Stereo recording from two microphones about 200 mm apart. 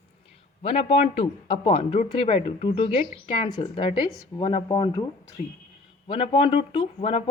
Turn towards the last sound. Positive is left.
turn(degrees=30)  # may be behind; listen again after turning